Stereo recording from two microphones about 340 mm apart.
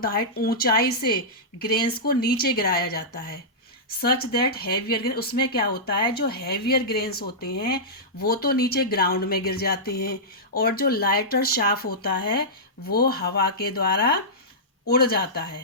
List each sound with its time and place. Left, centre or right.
0.0 s speech: left